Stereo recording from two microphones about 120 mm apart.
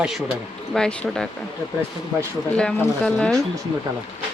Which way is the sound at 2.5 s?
10° left (ahead or behind).